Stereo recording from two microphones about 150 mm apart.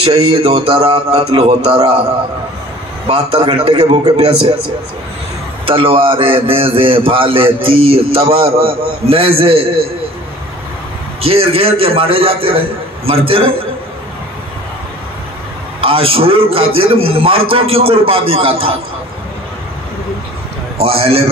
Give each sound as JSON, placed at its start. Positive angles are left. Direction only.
{"t": 0.3, "sound": "a man's voice", "side_deg": -40}
{"t": 3.1, "sound": "a man's voice", "side_deg": -40}
{"t": 5.7, "sound": "a man's voice", "side_deg": -35}
{"t": 11.1, "sound": "a man's voice", "side_deg": -40}
{"t": 15.8, "sound": "a man's voice", "side_deg": -40}
{"t": 20.8, "sound": "a man's voice", "side_deg": -40}